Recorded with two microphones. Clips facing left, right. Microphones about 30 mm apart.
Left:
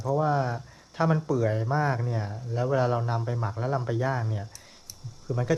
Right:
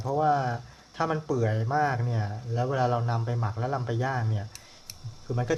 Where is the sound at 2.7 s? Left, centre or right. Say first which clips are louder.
Left 1 dB; right.